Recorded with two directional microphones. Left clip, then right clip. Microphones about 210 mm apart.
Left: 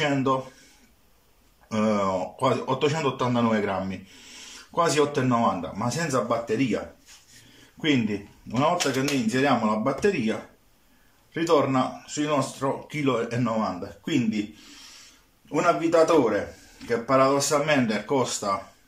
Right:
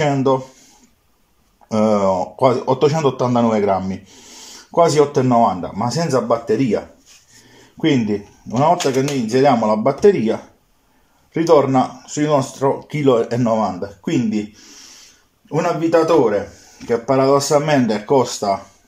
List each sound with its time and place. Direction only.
0.0 s speech: 30° right (ahead or behind)
1.7 s speech: 30° right (ahead or behind)
7.8 s speech: 25° right (ahead or behind)
11.3 s speech: 30° right (ahead or behind)
15.5 s speech: 25° right (ahead or behind)